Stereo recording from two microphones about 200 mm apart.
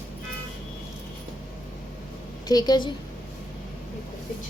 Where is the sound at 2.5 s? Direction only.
20° left (ahead or behind).